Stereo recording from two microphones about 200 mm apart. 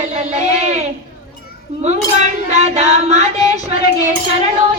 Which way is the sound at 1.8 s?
35° right (ahead or behind).